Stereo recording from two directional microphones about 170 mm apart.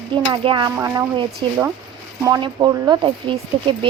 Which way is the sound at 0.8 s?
15° right (ahead or behind).